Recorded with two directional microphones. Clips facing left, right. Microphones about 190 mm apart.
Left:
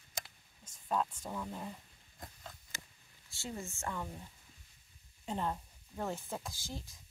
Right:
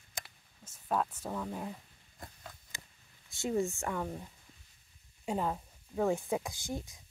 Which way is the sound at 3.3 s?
20° right (ahead or behind).